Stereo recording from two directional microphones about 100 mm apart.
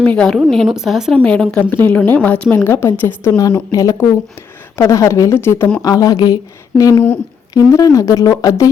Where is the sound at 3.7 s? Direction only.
35° left (ahead or behind).